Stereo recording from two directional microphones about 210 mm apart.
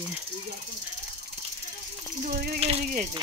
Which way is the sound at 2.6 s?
30° right (ahead or behind).